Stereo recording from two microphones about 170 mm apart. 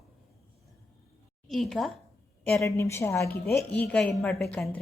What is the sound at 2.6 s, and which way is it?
A woman's voice, 15° left (ahead or behind).